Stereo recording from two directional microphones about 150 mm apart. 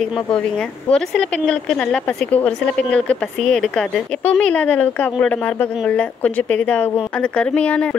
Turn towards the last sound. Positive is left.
turn(degrees=10)  # may be behind; listen again after turning